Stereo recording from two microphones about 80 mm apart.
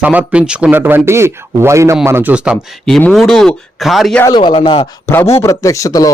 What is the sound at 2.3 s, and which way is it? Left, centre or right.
Speech, centre.